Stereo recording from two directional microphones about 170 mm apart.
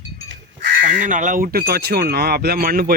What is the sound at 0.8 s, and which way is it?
Speech, 50° right (ahead or behind).